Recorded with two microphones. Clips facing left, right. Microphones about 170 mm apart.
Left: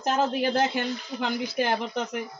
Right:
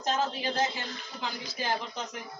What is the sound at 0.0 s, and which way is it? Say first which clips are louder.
Speech: left 6 dB; 55° left (ahead or behind).